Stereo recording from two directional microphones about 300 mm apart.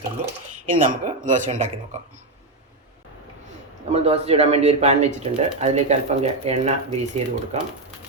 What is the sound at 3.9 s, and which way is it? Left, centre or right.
Cutlery, right.